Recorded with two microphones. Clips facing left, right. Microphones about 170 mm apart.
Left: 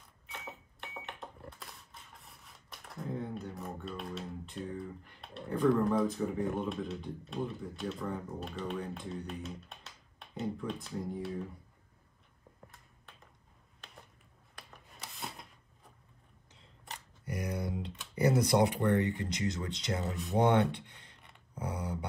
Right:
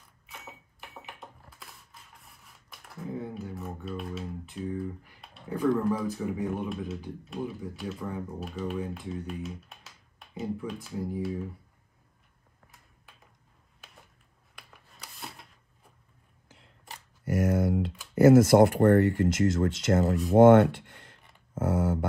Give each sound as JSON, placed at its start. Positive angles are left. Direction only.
{"t": 0.3, "sound": "cash register", "side_deg": 0}
{"t": 14.7, "sound": "rub", "side_deg": 0}
{"t": 16.4, "sound": "a sound", "side_deg": -5}
{"t": 17.3, "sound": "typing", "side_deg": -90}
{"t": 17.8, "sound": "computer keyboard", "side_deg": 0}
{"t": 18.1, "sound": "speech", "side_deg": -90}
{"t": 18.8, "sound": "speech", "side_deg": -70}
{"t": 19.0, "sound": "speech", "side_deg": 0}
{"t": 19.9, "sound": "speech", "side_deg": -70}
{"t": 20.3, "sound": "speech", "side_deg": -85}
{"t": 20.8, "sound": "a sound", "side_deg": 0}
{"t": 21.5, "sound": "speech", "side_deg": -80}